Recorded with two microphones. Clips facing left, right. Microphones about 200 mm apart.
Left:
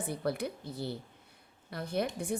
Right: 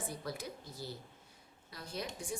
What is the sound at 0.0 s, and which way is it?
Speech, 60° left (ahead or behind).